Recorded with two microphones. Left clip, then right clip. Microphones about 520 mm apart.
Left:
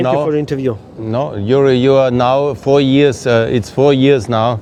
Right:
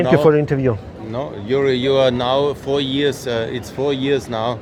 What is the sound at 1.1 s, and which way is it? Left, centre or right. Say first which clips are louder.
Speech: left 6 dB; left.